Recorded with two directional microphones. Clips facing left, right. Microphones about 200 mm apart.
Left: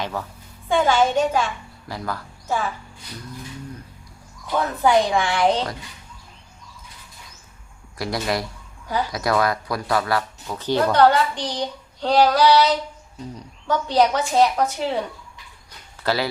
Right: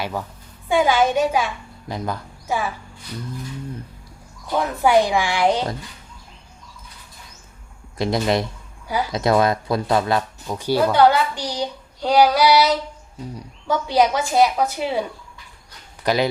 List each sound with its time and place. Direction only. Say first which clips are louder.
0.0 s a woman's voice: right 1 dB; 15° right (ahead or behind)
4.5 s speech: right 1 dB; 10° right (ahead or behind)
7.9 s speech: right 5 dB; 25° right (ahead or behind)
16.0 s speech: right 3 dB; 20° right (ahead or behind)